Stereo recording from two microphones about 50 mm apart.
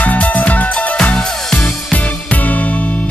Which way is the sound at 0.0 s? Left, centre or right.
Left.